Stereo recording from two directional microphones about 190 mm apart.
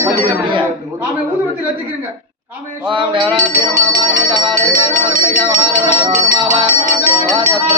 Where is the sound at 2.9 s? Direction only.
25° right (ahead or behind).